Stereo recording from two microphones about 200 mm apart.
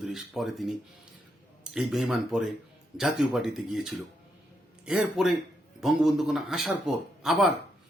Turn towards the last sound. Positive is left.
turn(degrees=0)  # may be behind; listen again after turning